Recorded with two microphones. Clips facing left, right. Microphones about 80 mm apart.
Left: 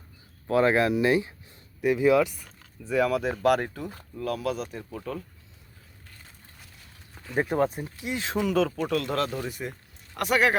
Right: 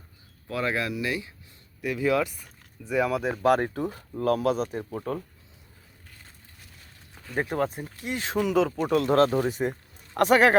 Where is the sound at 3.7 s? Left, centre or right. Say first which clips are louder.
Right 6 dB; right.